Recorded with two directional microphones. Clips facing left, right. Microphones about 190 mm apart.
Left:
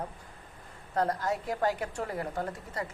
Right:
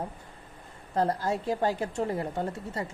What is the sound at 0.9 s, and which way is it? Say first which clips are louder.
A woman's voice: right 2 dB; 30° right (ahead or behind).